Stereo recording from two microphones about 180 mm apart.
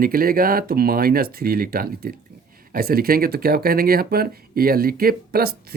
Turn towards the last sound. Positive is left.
turn(degrees=-60)  # may be behind; listen again after turning